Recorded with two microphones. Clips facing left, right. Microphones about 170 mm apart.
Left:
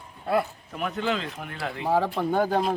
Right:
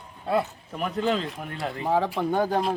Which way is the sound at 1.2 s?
Centre (ahead or behind).